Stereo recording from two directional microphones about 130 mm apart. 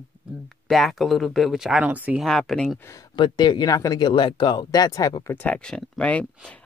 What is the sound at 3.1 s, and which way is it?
Speech, 35° left (ahead or behind).